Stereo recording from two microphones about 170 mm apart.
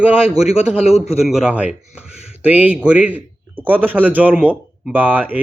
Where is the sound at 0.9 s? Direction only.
35° left (ahead or behind).